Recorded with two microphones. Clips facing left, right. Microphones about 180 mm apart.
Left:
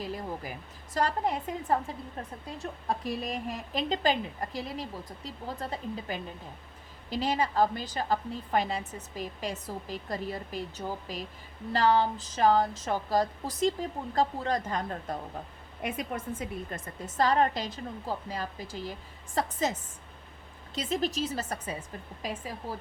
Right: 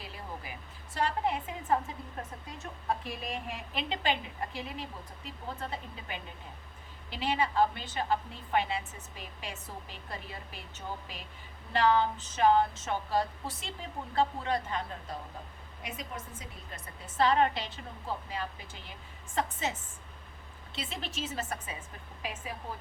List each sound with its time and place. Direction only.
0.0 s a sound: 40° left (ahead or behind)
0.9 s a woman's voice: 40° left (ahead or behind)
20.7 s a woman's voice: 40° left (ahead or behind)